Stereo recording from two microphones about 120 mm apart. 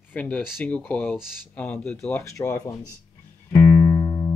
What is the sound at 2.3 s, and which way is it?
Speech, 25° left (ahead or behind).